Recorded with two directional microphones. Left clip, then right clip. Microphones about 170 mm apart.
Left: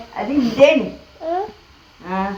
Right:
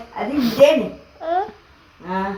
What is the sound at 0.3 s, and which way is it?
Speech, centre (ahead or behind).